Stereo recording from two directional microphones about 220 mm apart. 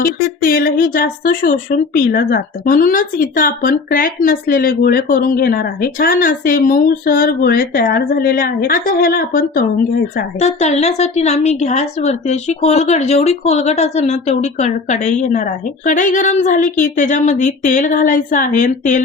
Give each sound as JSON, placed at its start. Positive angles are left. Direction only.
{"t": 0.0, "sound": "speech", "side_deg": 40}
{"t": 10.4, "sound": "speech", "side_deg": 30}